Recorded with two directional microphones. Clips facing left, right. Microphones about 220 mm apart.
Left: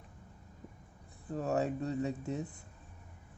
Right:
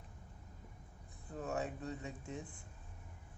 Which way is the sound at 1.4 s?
35° left (ahead or behind).